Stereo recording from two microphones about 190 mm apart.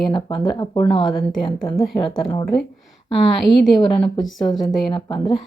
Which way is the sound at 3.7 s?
25° left (ahead or behind).